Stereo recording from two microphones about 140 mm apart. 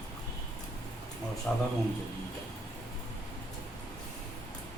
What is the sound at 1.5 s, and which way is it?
Speech, 5° left (ahead or behind).